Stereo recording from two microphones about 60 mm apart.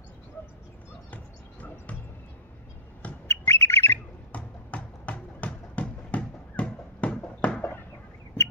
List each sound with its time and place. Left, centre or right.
1.1 s music: left
3.3 s squawk: left
4.3 s a sound: left